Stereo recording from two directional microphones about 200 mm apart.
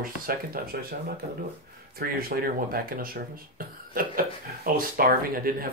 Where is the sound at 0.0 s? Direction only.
45° right (ahead or behind).